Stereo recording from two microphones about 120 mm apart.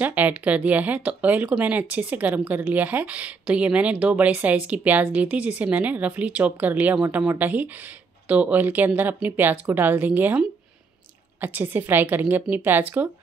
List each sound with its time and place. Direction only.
0.0 s speech: 15° right (ahead or behind)
11.4 s speech: 15° right (ahead or behind)